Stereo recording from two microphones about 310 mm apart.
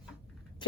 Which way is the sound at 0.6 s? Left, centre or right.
Centre.